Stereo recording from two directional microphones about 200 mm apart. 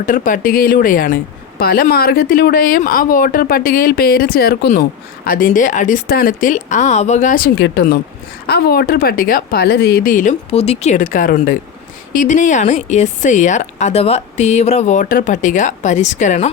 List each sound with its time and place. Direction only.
0.0 s speech: 40° left (ahead or behind)
7.6 s speech: 60° left (ahead or behind); by 16.5 s 35° left (ahead or behind)